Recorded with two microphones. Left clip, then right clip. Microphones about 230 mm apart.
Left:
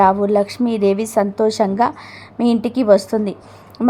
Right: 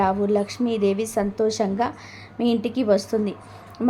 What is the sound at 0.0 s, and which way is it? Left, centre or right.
A woman's voice, left.